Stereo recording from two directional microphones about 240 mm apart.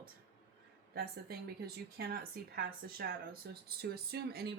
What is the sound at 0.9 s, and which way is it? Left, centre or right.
A woman's voice, right.